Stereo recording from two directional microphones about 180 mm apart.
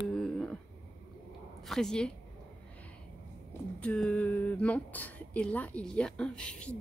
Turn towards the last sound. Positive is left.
turn(degrees=5)  # may be behind; listen again after turning